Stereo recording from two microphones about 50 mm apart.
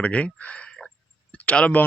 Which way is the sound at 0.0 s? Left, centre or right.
Left.